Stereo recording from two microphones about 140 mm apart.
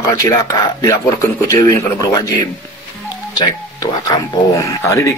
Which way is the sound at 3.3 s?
30° left (ahead or behind).